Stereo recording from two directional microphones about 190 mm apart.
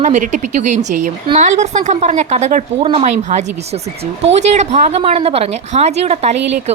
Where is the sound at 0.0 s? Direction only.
40° right (ahead or behind).